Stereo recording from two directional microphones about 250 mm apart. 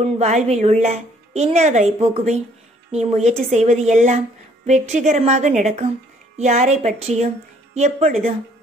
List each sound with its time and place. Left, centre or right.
0.0 s a woman's voice: right